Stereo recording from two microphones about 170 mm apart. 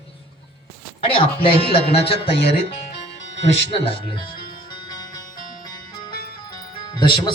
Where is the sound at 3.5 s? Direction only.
35° left (ahead or behind).